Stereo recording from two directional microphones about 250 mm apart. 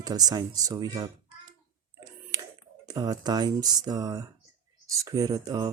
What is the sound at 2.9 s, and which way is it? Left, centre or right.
Speech, centre.